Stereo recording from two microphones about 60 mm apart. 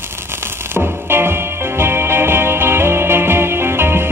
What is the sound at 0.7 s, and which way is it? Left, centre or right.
Music, right.